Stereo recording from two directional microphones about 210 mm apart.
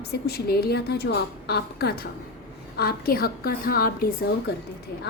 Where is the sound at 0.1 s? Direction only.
50° left (ahead or behind).